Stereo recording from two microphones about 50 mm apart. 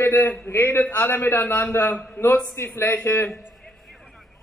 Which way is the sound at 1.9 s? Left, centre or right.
Left.